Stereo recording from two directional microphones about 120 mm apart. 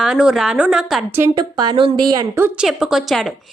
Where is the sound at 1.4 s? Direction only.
40° right (ahead or behind).